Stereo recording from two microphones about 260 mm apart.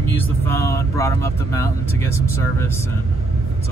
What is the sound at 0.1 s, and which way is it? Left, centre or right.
Speech, centre.